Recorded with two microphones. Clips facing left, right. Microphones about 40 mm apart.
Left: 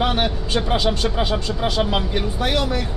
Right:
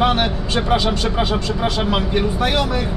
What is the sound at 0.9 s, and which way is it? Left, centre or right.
Speech, centre.